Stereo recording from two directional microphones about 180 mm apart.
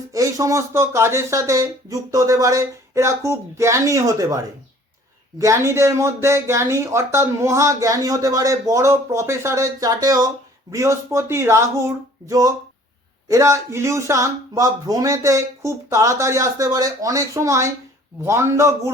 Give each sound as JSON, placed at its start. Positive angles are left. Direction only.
{"t": 0.1, "sound": "speech", "side_deg": -20}